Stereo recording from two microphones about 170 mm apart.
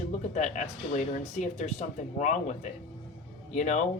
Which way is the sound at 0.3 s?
45° left (ahead or behind).